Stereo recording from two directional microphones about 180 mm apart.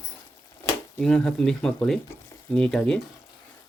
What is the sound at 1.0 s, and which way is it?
Cutlery, 5° left (ahead or behind).